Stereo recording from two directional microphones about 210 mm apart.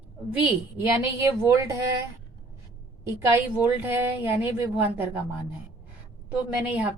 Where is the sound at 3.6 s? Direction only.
10° right (ahead or behind).